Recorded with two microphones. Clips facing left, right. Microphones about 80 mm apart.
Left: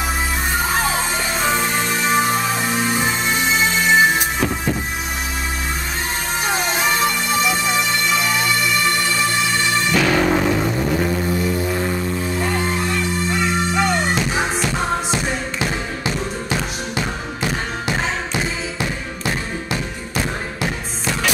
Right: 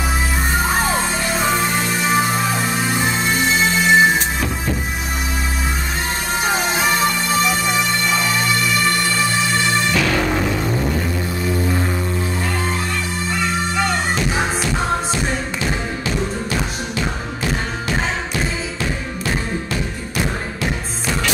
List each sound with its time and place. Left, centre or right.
0.9 s music: centre
6.4 s music: centre
12.4 s music: centre
18.8 s music: centre